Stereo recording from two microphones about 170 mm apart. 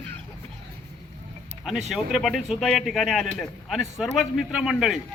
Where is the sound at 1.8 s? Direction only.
Centre (ahead or behind).